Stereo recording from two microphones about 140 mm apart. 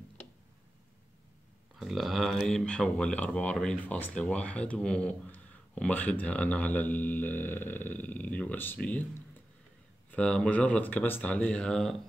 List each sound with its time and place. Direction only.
1.8 s speech: centre (ahead or behind)
10.1 s speech: 5° left (ahead or behind)